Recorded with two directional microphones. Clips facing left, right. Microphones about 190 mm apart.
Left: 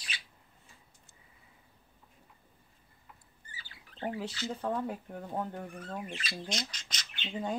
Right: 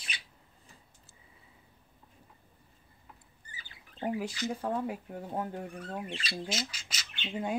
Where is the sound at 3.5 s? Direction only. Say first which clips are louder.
Even; 15° right (ahead or behind).